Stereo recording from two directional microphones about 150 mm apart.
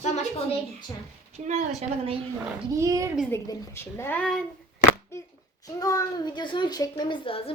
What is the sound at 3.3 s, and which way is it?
Speech, 15° left (ahead or behind).